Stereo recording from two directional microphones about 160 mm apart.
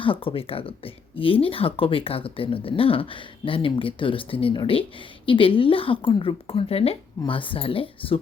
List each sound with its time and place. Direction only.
0.0 s speech: 35° left (ahead or behind)